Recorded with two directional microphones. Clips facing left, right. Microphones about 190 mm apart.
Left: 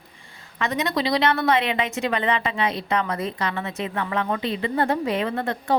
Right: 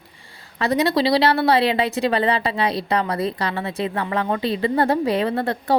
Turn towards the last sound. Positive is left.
turn(degrees=-35)  # may be behind; listen again after turning